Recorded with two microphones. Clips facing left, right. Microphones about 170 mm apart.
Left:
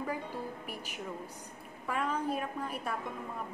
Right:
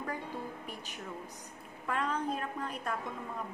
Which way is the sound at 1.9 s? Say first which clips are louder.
Left 1 dB; 5° left (ahead or behind).